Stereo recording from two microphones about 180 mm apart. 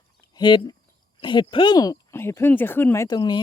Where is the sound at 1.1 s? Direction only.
25° left (ahead or behind).